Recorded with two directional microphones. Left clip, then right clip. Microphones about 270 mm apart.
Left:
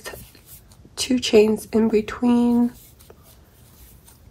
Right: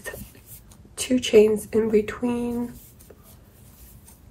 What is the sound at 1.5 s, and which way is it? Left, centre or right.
Speech, centre.